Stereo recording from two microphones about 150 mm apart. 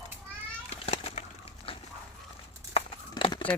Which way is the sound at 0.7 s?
45° left (ahead or behind).